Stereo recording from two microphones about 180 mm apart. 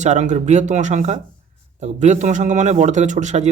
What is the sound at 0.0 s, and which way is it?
Speech, 40° right (ahead or behind).